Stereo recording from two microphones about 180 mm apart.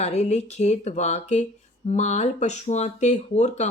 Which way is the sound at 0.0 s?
40° left (ahead or behind).